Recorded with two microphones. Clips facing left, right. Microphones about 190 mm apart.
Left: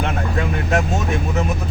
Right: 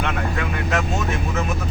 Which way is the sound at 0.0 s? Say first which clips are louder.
Left 2 dB; 40° left (ahead or behind).